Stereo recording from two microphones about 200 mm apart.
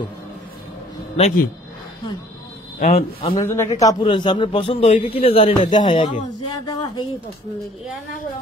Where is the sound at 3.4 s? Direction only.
15° left (ahead or behind).